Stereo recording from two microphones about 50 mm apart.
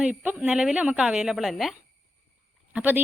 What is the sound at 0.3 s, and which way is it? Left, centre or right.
Speech, right.